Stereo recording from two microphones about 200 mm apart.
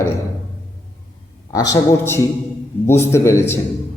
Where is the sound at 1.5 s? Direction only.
15° left (ahead or behind).